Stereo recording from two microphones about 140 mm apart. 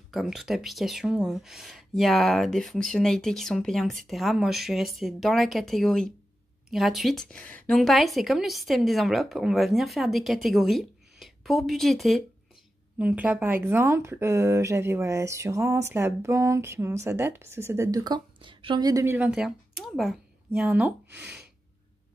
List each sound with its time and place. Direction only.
0.1 s a woman's voice: centre (ahead or behind)
13.0 s speech: 10° right (ahead or behind); by 19.0 s 25° right (ahead or behind)
19.0 s speech: 10° right (ahead or behind)
20.6 s speech: 15° right (ahead or behind)